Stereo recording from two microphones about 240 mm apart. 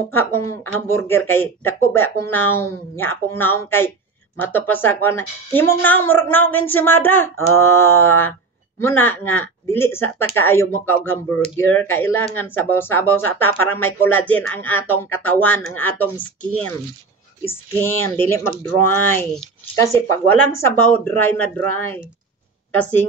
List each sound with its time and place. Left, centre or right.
0.1 s a woman's voice: centre
17.7 s a woman's voice: centre
18.5 s speech: right
18.9 s a woman's voice: centre